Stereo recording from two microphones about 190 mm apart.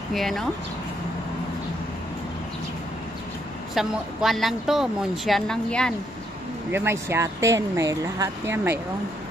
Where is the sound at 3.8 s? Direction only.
Centre (ahead or behind).